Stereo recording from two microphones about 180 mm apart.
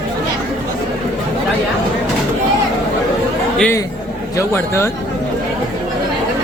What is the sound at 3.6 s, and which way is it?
A man's voice, 10° left (ahead or behind).